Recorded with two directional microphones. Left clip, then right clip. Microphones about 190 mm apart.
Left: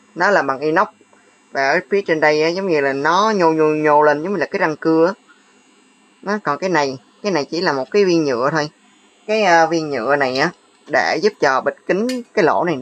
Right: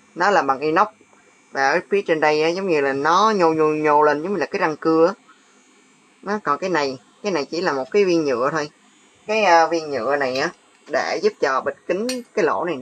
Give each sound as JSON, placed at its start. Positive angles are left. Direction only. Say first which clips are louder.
{"t": 0.1, "sound": "speech", "louder": "left 2 dB", "side_deg": 15}
{"t": 6.2, "sound": "a woman's voice", "louder": "left 2 dB", "side_deg": 20}
{"t": 9.2, "sound": "speech", "louder": "left 2 dB", "side_deg": 40}